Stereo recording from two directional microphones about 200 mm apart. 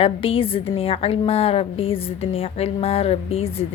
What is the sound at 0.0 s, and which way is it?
A woman's voice, 25° left (ahead or behind).